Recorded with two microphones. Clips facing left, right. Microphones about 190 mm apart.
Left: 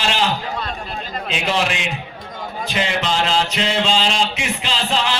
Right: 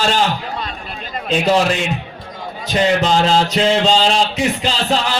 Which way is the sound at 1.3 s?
40° right (ahead or behind).